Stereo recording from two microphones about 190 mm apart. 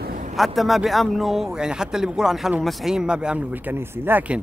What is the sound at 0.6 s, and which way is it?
Speech, centre (ahead or behind).